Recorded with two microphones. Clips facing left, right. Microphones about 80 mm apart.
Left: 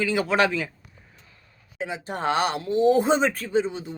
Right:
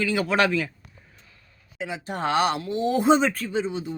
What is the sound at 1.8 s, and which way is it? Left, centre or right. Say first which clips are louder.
Speech: even; left.